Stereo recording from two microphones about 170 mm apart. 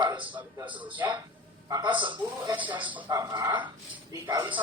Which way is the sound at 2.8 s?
10° right (ahead or behind).